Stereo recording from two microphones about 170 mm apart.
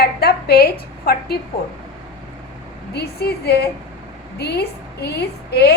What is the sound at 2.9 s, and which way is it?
A woman's voice, 70° left (ahead or behind).